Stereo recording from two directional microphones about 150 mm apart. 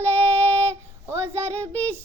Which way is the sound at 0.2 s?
10° left (ahead or behind).